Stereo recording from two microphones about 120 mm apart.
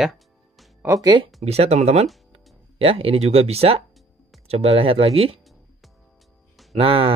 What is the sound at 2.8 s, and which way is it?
Speech, 50° right (ahead or behind).